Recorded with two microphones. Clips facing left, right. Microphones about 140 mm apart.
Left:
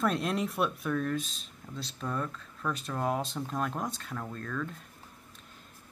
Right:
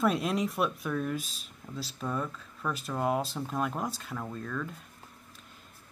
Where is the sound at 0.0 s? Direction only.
Centre (ahead or behind).